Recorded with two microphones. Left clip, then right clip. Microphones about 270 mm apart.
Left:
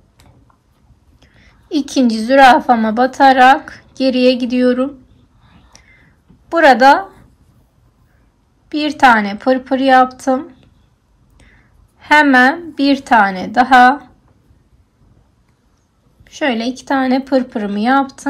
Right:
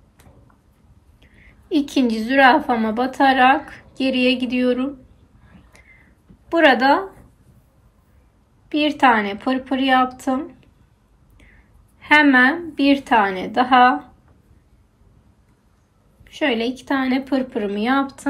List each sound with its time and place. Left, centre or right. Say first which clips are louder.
1.2 s a woman's voice: left 2 dB; centre
5.7 s a sound: left 4 dB; centre
6.5 s speech: left 6 dB; centre
8.6 s speech: left 5 dB; centre
12.0 s speech: left 4 dB; centre
16.3 s speech: left 3 dB; centre